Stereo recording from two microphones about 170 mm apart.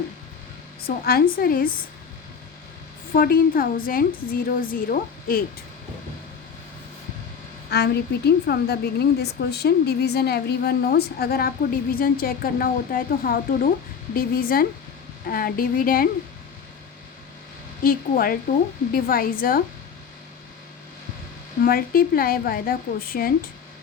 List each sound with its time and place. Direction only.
0.9 s a woman's voice: 65° left (ahead or behind)
3.2 s a woman's voice: 55° left (ahead or behind)
7.7 s a woman's voice: 70° left (ahead or behind)
17.8 s a woman's voice: 60° left (ahead or behind)
21.6 s a woman's voice: 60° left (ahead or behind)